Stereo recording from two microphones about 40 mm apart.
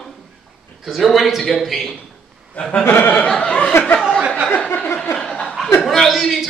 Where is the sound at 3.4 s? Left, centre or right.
Left.